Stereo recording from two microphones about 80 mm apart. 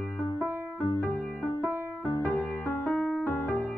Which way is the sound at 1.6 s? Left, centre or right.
Left.